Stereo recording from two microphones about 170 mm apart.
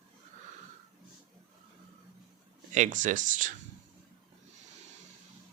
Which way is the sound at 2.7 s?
45° right (ahead or behind).